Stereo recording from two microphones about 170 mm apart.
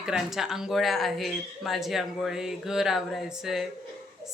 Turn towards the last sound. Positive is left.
turn(degrees=0)  # may be behind; listen again after turning